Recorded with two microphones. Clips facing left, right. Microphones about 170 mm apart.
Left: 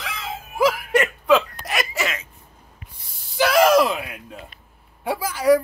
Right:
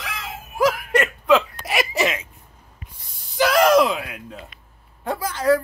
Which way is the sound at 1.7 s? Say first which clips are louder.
Right 5 dB; 15° right (ahead or behind).